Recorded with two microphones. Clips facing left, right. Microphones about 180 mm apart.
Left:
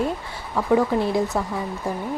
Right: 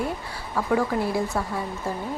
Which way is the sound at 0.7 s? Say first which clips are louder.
Left 4 dB; 20° left (ahead or behind).